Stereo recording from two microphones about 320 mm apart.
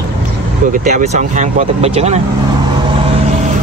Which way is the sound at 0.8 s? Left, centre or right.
Right.